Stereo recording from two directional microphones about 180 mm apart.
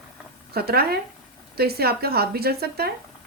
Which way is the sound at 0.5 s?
60° right (ahead or behind).